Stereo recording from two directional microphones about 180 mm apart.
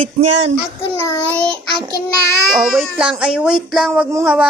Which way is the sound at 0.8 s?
15° left (ahead or behind).